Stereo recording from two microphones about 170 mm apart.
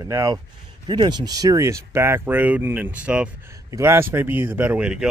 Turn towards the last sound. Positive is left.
turn(degrees=-5)  # may be behind; listen again after turning